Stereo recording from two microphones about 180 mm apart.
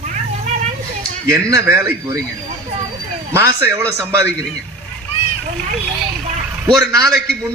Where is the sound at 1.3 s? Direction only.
15° right (ahead or behind).